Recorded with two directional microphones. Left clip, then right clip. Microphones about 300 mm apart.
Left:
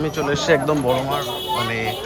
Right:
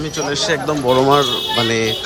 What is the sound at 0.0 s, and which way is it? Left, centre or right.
Speech, centre.